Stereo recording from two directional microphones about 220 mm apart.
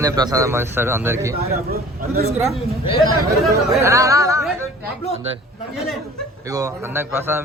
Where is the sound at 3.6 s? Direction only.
15° right (ahead or behind).